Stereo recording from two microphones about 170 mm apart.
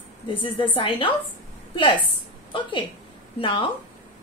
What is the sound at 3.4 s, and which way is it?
Speech, 30° left (ahead or behind).